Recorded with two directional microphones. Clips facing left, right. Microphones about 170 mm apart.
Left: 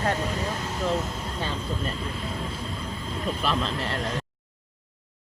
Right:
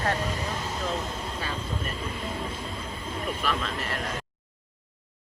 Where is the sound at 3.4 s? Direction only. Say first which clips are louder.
Left 4 dB; 30° left (ahead or behind).